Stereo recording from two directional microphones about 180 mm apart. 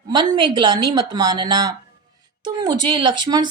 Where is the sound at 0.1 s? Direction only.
25° right (ahead or behind).